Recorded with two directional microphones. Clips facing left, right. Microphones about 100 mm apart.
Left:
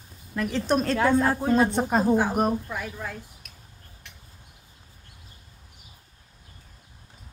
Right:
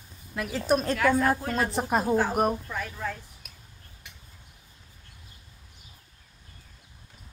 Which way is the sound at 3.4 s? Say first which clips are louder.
Left 1 dB; 5° right (ahead or behind).